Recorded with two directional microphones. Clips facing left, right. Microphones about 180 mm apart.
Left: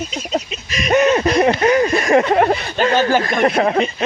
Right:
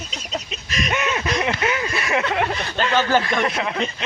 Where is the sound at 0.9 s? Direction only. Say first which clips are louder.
Left 11 dB; 40° left (ahead or behind).